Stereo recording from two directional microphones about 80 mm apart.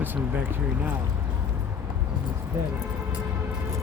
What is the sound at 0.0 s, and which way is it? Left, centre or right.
Speech, right.